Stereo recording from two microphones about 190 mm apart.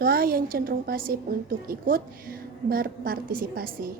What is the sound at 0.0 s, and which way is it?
A woman's voice, 50° right (ahead or behind).